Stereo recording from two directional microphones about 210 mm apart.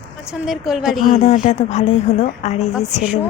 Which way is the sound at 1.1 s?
35° left (ahead or behind).